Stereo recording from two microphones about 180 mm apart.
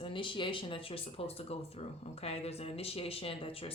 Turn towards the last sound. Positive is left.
turn(degrees=30)  # may be behind; listen again after turning